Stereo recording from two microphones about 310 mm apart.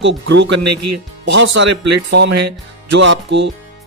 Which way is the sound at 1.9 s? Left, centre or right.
Right.